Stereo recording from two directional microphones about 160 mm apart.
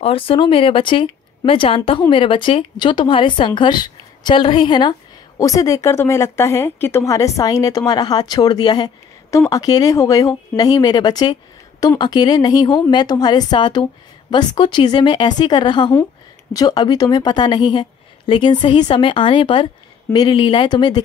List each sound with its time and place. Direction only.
0.0 s speech: 35° left (ahead or behind)